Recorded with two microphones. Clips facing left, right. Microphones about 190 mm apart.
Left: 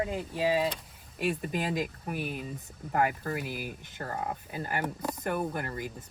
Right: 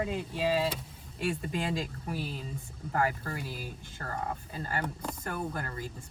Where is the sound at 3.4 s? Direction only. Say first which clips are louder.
Left 3 dB; 60° left (ahead or behind).